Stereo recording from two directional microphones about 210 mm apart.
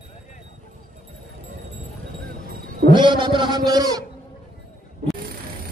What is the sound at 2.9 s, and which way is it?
A man's voice, 20° right (ahead or behind).